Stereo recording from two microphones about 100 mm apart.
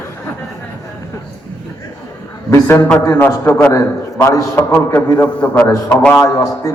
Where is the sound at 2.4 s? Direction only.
30° left (ahead or behind).